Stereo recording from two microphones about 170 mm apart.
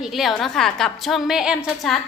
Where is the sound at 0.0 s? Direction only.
Centre (ahead or behind).